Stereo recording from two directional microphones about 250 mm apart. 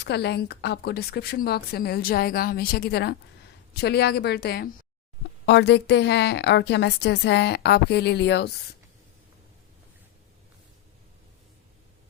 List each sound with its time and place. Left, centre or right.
0.0 s a woman's voice: left